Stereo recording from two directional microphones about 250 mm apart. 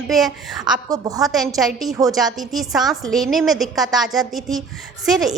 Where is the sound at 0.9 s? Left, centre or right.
Centre.